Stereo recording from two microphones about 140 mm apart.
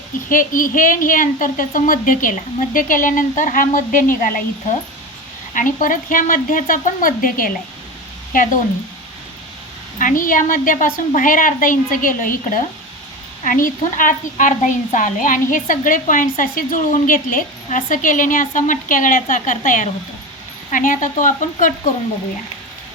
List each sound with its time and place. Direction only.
0.3 s a woman's voice: 75° left (ahead or behind)
5.5 s speech: 70° left (ahead or behind); by 7.5 s 90° left
10.0 s speech: 75° left (ahead or behind)